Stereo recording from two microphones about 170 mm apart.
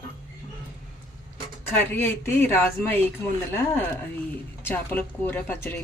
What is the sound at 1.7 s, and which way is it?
A woman's voice, 10° left (ahead or behind).